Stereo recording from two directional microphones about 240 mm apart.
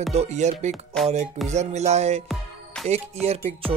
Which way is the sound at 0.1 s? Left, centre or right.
Right.